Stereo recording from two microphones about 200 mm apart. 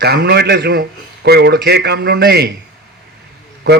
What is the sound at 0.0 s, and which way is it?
A man's voice, 55° right (ahead or behind).